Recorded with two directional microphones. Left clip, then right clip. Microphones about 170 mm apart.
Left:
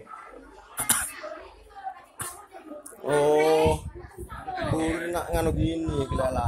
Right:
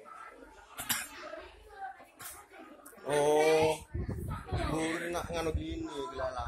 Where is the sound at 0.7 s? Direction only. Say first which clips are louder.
Left 7 dB; 25° left (ahead or behind).